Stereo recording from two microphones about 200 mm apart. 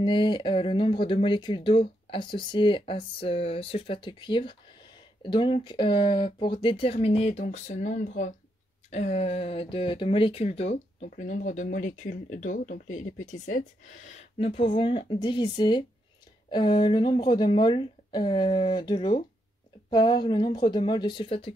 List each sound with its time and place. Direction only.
0.0 s speech: 25° left (ahead or behind)